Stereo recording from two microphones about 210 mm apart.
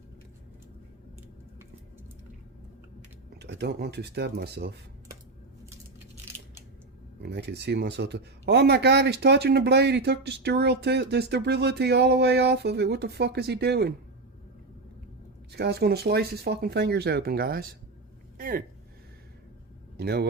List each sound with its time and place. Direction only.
3.4 s speech: 50° right (ahead or behind)
7.2 s speech: 50° right (ahead or behind)
15.5 s speech: 50° right (ahead or behind)
18.3 s a sound: 40° right (ahead or behind)
20.0 s speech: 50° right (ahead or behind)